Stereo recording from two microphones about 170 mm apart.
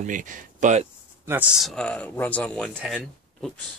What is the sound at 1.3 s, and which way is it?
Speech, 5° right (ahead or behind).